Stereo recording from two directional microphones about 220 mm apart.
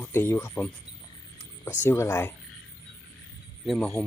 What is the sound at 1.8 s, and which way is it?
Speech, 10° left (ahead or behind).